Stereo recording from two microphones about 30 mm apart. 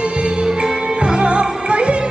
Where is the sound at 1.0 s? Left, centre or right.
Right.